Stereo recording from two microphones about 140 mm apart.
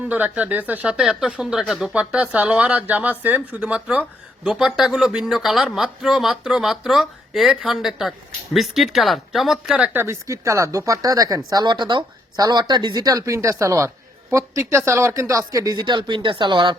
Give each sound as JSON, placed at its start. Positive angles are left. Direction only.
{"t": 0.0, "sound": "speech", "side_deg": -10}